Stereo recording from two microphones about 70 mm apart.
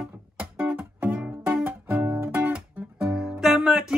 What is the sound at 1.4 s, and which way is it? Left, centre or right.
Music, right.